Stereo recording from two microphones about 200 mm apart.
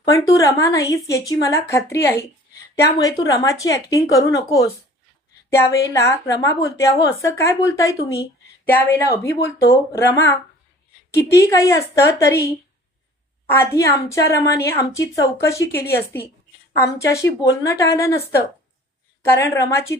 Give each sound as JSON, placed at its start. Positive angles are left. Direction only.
{"t": 0.1, "sound": "a woman's voice", "side_deg": 15}
{"t": 3.4, "sound": "a woman's voice", "side_deg": 15}
{"t": 13.5, "sound": "a woman's voice", "side_deg": 10}
{"t": 19.2, "sound": "a woman's voice", "side_deg": 15}